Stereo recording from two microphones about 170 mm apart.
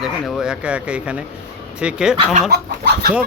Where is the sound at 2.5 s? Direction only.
70° right (ahead or behind).